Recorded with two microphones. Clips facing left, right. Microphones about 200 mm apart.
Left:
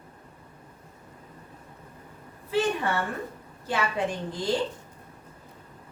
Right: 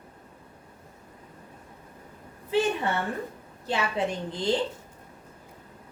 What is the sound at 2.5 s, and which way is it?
Speech, 20° right (ahead or behind).